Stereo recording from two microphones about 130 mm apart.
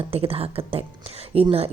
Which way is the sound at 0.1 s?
50° right (ahead or behind).